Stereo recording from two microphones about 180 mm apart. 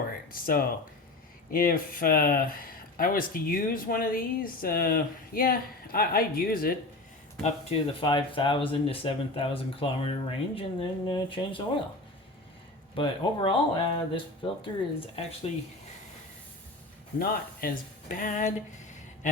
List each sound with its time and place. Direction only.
0.3 s speech: 55° left (ahead or behind)
7.4 s speech: 30° left (ahead or behind)
13.0 s speech: 30° left (ahead or behind)
17.2 s speech: 55° left (ahead or behind)
19.2 s a sound: 45° left (ahead or behind)